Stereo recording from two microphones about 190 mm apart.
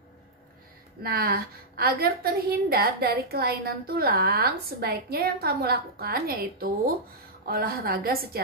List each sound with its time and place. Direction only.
1.0 s a woman's voice: 50° right (ahead or behind)